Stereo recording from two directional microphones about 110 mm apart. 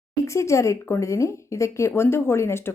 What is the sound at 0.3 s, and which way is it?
Speech, 25° left (ahead or behind).